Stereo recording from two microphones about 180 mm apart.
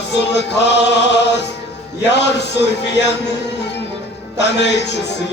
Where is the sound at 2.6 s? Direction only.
70° left (ahead or behind).